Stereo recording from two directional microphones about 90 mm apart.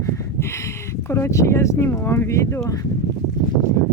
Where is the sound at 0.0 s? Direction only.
30° left (ahead or behind).